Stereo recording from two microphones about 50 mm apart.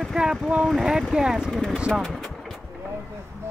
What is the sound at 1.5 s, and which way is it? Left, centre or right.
Speech, centre.